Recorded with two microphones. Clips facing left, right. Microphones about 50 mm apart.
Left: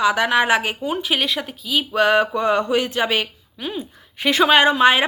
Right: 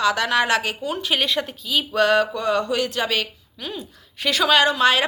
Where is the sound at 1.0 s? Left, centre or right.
Centre.